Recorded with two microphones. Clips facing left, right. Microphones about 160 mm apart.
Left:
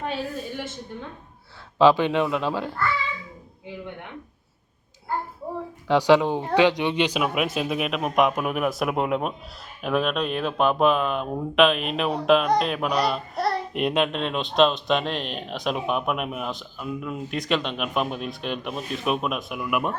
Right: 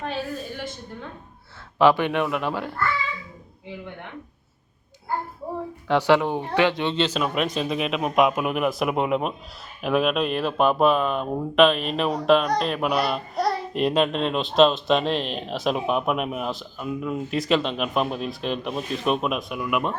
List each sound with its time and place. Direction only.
1.8 s speech: 15° left (ahead or behind)
5.9 s a child's voice: 15° left (ahead or behind)